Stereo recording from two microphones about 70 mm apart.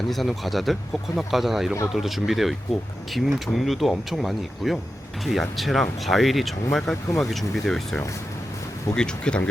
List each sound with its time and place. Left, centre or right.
0.1 s speech: centre